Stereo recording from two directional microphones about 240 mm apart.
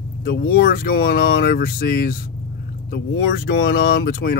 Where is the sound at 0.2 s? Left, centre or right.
Left.